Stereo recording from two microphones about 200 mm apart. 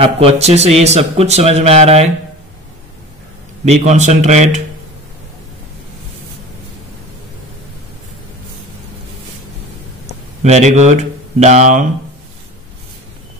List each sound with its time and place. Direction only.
0.0 s a man's voice: 30° right (ahead or behind)
3.6 s a man's voice: 35° right (ahead or behind)
10.4 s a man's voice: 35° right (ahead or behind)